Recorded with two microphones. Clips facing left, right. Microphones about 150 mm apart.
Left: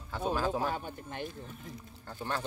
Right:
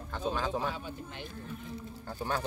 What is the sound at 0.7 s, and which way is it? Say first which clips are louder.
Speech: left 2 dB; 50° left (ahead or behind).